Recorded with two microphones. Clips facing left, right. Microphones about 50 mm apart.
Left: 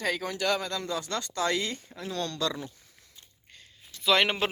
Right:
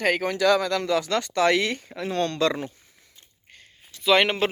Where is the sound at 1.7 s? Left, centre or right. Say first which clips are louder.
Right 7 dB; right.